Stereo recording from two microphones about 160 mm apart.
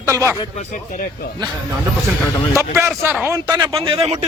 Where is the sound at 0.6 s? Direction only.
50° left (ahead or behind).